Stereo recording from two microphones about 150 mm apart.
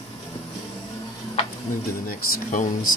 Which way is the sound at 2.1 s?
65° left (ahead or behind).